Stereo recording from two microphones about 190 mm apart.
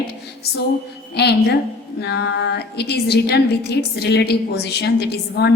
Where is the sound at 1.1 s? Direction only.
60° left (ahead or behind).